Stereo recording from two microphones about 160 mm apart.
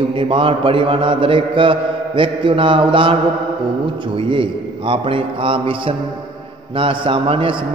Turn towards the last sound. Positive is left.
turn(degrees=-30)  # may be behind; listen again after turning